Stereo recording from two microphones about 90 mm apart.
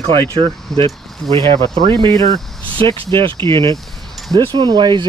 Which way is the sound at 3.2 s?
65° right (ahead or behind).